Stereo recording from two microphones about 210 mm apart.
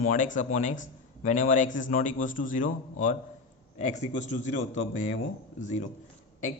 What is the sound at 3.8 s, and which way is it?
A man's voice, 35° left (ahead or behind).